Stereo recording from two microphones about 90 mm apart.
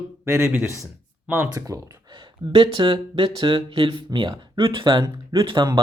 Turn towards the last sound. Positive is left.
turn(degrees=-60)  # may be behind; listen again after turning